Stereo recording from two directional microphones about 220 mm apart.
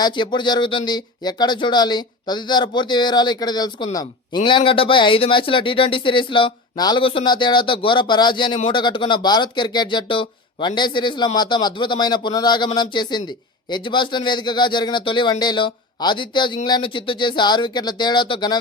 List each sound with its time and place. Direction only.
0.0 s speech: 20° left (ahead or behind)